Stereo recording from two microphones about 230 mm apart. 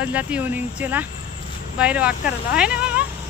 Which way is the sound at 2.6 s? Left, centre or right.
Centre.